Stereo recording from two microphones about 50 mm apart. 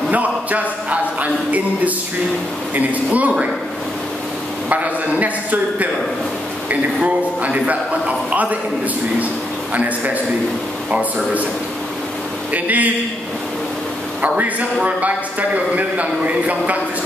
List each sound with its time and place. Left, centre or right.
0.1 s a man's voice: right
4.6 s a man's voice: right
9.8 s speech: right
12.5 s speech: right
14.2 s a man's voice: right